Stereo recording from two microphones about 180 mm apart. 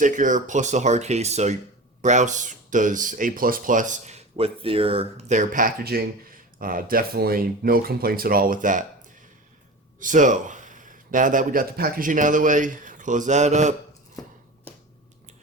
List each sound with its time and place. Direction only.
0.0 s speech: 45° right (ahead or behind)